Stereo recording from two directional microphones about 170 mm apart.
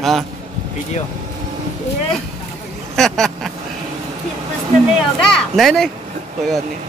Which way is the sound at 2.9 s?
Centre (ahead or behind).